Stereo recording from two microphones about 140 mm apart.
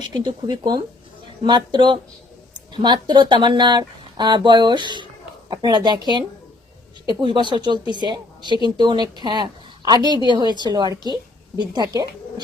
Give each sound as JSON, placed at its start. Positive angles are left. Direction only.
{"t": 0.1, "sound": "speech", "side_deg": -30}